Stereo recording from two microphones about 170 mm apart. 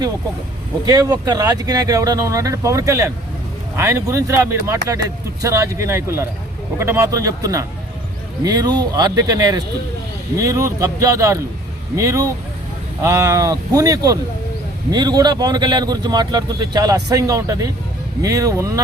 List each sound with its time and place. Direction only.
0.9 s speech: 20° right (ahead or behind)